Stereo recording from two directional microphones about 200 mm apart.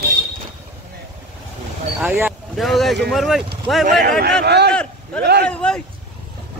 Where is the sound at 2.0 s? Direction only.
10° right (ahead or behind).